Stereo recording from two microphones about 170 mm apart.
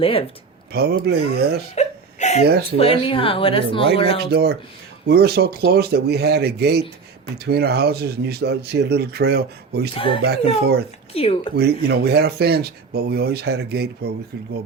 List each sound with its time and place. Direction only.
0.0 s speech: 35° left (ahead or behind)
0.7 s speech: 70° right (ahead or behind)
1.7 s whimper: 40° left (ahead or behind)
2.7 s speech: 35° left (ahead or behind)
4.2 s speech: 70° right (ahead or behind)
9.9 s speech: 30° left (ahead or behind)
10.2 s speech: 70° right (ahead or behind)
11.1 s speech: 35° left (ahead or behind)
11.5 s speech: 70° right (ahead or behind)